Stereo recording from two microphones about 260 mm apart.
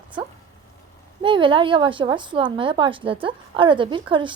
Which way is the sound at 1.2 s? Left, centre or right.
Centre.